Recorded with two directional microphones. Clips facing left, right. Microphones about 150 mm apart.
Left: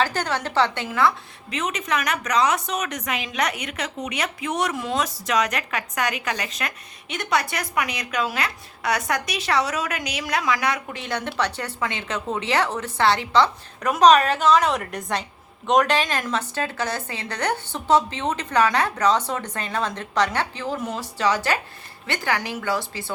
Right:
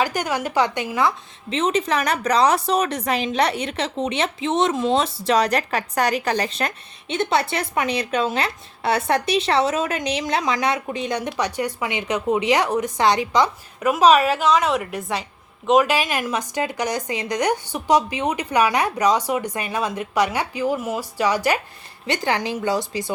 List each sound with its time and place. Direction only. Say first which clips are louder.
0.0 s a woman's voice: right 2 dB; 10° right (ahead or behind)